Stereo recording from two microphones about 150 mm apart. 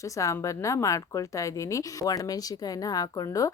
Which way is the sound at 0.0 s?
20° left (ahead or behind).